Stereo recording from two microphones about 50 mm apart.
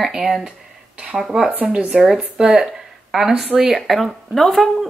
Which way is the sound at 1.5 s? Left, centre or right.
Right.